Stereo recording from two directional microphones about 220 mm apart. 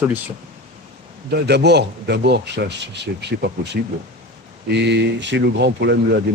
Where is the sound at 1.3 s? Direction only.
50° right (ahead or behind).